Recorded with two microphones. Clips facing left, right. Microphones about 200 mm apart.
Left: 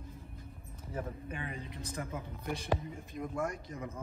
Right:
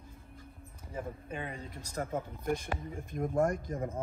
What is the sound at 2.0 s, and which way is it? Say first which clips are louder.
Speech: right 7 dB; 45° right (ahead or behind).